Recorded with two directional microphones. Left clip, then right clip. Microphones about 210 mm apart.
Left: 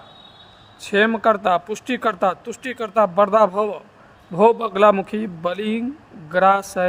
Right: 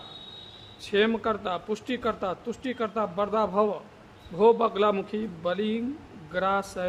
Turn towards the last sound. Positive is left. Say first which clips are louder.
# left 11 dB
turn(degrees=35)  # may be behind; listen again after turning